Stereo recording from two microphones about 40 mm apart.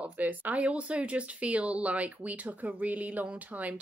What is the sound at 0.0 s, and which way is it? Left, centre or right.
Speech, right.